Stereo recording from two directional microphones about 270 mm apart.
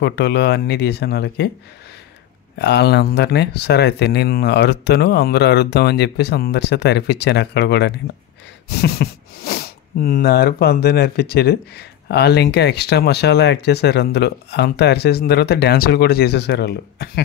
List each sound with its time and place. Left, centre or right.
0.0 s speech: left
2.6 s speech: left